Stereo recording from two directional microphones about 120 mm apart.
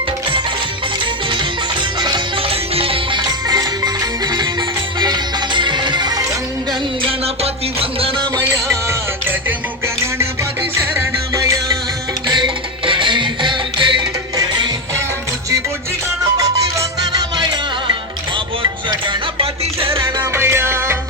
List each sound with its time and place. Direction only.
2.0 s music: 40° right (ahead or behind)
7.1 s music: 55° right (ahead or behind)
8.9 s music: 20° right (ahead or behind)
12.3 s music: 45° right (ahead or behind)
16.4 s music: 30° right (ahead or behind); by 20.2 s 45° right (ahead or behind)
20.3 s music: 20° right (ahead or behind)